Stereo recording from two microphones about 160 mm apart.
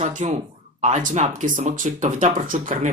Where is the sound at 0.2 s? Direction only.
45° right (ahead or behind).